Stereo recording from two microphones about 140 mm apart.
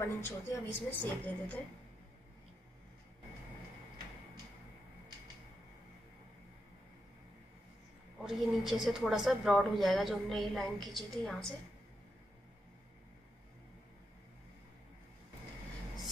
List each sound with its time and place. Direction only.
0.0 s a woman's voice: 20° left (ahead or behind)
8.2 s a woman's voice: 5° right (ahead or behind)